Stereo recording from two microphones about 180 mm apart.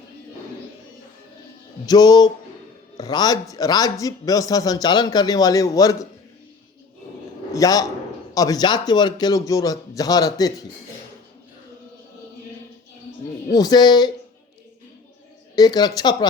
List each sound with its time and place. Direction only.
1.9 s a man's voice: 20° left (ahead or behind)
7.5 s a man's voice: 20° left (ahead or behind)
13.5 s a man's voice: 20° left (ahead or behind)
15.5 s a man's voice: 20° left (ahead or behind)